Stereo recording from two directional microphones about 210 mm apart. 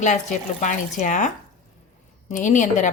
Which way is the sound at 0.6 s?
35° left (ahead or behind).